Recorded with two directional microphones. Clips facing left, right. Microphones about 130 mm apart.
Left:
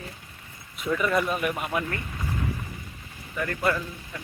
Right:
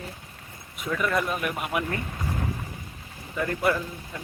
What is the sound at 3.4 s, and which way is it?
Speech, 15° right (ahead or behind).